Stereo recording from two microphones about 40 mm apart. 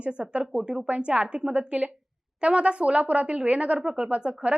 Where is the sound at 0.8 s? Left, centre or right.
Right.